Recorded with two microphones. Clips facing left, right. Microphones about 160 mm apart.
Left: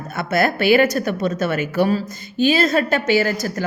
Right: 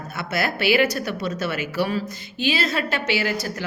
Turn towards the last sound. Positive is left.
turn(degrees=45)  # may be behind; listen again after turning